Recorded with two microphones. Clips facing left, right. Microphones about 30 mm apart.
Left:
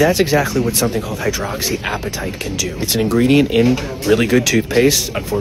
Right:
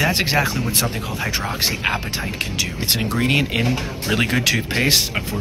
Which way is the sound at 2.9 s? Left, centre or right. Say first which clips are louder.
Left 7 dB; right.